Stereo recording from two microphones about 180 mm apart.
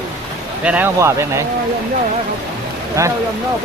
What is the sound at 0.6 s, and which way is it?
Speech, 10° right (ahead or behind).